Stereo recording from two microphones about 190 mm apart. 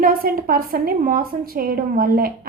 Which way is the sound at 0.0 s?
50° right (ahead or behind).